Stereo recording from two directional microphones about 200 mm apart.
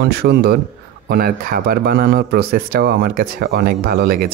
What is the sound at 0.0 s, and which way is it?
Speech, 55° right (ahead or behind).